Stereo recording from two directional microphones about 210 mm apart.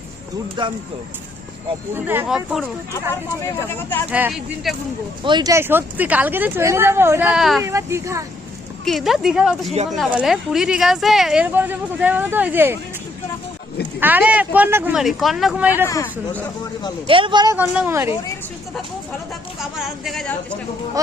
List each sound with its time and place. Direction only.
0.6 s speech: 20° right (ahead or behind)
2.0 s speech: 5° right (ahead or behind)
3.8 s speech: 10° left (ahead or behind)
4.1 s speech: 5° right (ahead or behind)
5.2 s speech: 20° right (ahead or behind); by 7.6 s centre (ahead or behind)
7.6 s speech: 15° right (ahead or behind)
8.8 s speech: centre (ahead or behind)
14.0 s speech: 10° right (ahead or behind)
15.9 s speech: 15° left (ahead or behind)
17.1 s speech: 25° right (ahead or behind)
19.7 s speech: centre (ahead or behind)